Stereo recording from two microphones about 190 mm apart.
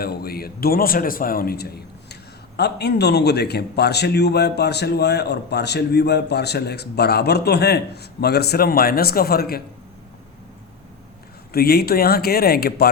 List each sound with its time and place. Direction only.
0.0 s a man's voice: 55° left (ahead or behind)
11.5 s speech: 55° left (ahead or behind)